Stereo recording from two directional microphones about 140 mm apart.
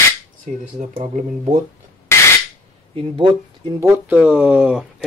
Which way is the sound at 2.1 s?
20° left (ahead or behind).